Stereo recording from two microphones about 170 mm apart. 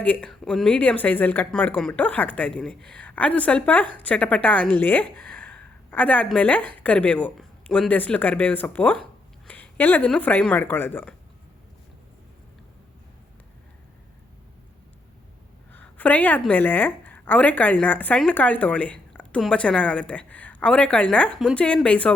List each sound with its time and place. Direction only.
0.0 s a woman's voice: 5° left (ahead or behind)
15.7 s a sound: 10° left (ahead or behind)
16.5 s a woman's voice: 10° left (ahead or behind)